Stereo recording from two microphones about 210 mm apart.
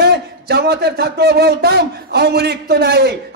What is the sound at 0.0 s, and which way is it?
A man's voice, 50° right (ahead or behind).